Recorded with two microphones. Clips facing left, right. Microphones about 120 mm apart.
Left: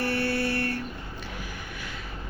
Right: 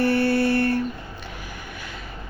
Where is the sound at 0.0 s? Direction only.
55° right (ahead or behind).